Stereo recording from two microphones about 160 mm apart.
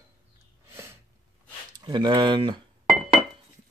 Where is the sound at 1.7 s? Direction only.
25° right (ahead or behind).